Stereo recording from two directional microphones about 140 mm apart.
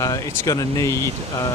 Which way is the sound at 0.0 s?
25° left (ahead or behind).